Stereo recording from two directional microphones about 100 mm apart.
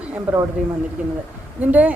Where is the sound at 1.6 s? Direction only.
15° right (ahead or behind).